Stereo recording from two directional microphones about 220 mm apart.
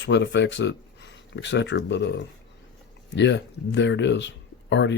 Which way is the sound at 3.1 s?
55° left (ahead or behind).